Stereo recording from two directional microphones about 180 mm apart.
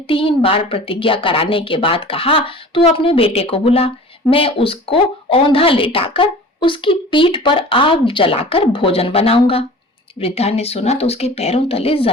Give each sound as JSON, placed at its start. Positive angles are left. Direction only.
{"t": 0.1, "sound": "a woman's voice", "side_deg": 30}